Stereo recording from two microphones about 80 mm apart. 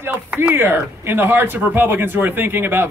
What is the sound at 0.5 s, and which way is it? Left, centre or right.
Speech, right.